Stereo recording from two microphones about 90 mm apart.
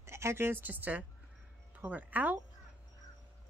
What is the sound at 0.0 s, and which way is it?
A woman's voice, 30° right (ahead or behind).